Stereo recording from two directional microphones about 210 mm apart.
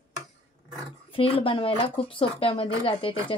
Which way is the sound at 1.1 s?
25° left (ahead or behind).